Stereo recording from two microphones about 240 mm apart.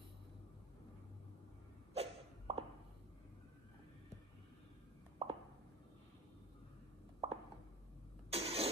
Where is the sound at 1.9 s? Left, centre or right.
Right.